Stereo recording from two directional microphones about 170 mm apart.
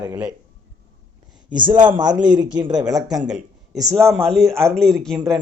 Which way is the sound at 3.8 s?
15° right (ahead or behind).